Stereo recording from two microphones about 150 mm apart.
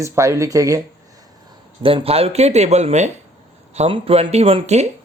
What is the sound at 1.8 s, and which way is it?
Speech, 40° right (ahead or behind).